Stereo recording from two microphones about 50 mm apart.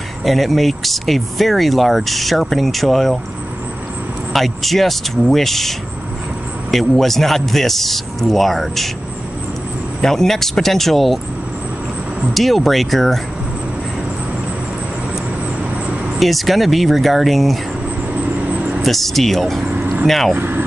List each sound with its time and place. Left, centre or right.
0.2 s speech: centre
4.3 s speech: centre
10.0 s speech: centre
12.4 s speech: centre
16.2 s speech: centre
18.5 s vehicle: right
18.8 s speech: centre
20.3 s speech: right